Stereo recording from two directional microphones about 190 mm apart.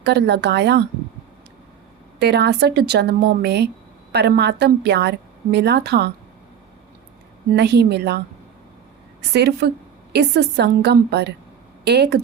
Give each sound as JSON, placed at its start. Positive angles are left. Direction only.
{"t": 0.0, "sound": "a woman's voice", "side_deg": -60}
{"t": 2.1, "sound": "a woman's voice", "side_deg": -60}
{"t": 7.5, "sound": "a woman's voice", "side_deg": -60}
{"t": 9.3, "sound": "a woman's voice", "side_deg": -60}